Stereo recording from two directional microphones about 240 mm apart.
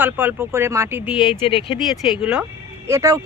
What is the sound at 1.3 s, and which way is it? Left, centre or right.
Speech, left.